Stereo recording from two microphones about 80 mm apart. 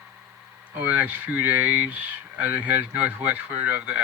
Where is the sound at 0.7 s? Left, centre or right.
Centre.